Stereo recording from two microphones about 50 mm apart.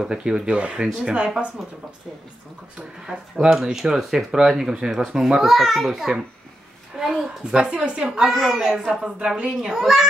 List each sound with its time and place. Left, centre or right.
0.0 s a woman's voice: centre
3.1 s a child's voice: centre
7.5 s a woman's voice: centre
9.0 s a woman's voice: right
9.8 s speech: centre